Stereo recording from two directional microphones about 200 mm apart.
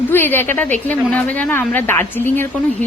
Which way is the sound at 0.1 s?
10° left (ahead or behind).